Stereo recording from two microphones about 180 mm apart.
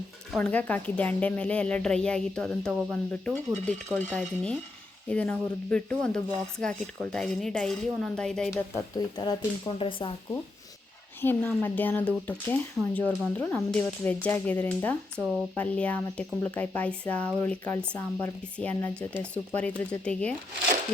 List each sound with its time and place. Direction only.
0.3 s speech: 5° left (ahead or behind)
9.0 s speech: 20° left (ahead or behind)
11.2 s speech: 10° left (ahead or behind)
15.2 s speech: centre (ahead or behind)